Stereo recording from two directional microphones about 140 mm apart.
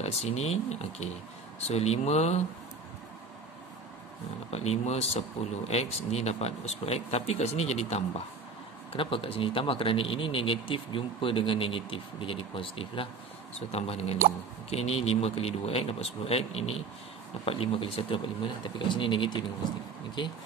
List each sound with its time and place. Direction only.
0.0 s speech: 50° left (ahead or behind)
4.5 s speech: 50° left (ahead or behind)
8.9 s speech: 40° left (ahead or behind)